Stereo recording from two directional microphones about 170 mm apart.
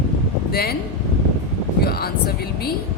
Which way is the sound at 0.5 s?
65° left (ahead or behind).